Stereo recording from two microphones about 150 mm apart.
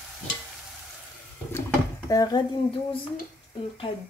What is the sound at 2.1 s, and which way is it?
Speech, 25° left (ahead or behind).